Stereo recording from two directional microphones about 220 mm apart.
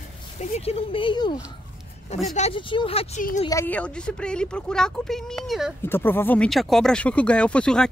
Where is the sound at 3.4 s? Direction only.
10° left (ahead or behind).